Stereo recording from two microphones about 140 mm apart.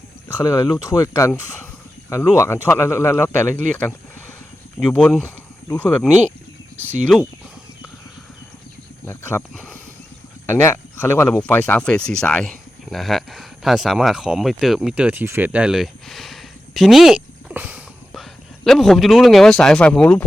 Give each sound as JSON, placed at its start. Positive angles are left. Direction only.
{"t": 0.4, "sound": "speech", "side_deg": 25}
{"t": 7.1, "sound": "speech", "side_deg": 5}
{"t": 9.0, "sound": "speech", "side_deg": 15}
{"t": 17.5, "sound": "a sound", "side_deg": -10}
{"t": 18.1, "sound": "a man's voice", "side_deg": 0}